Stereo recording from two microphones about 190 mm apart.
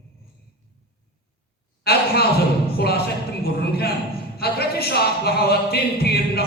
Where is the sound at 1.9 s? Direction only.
55° left (ahead or behind).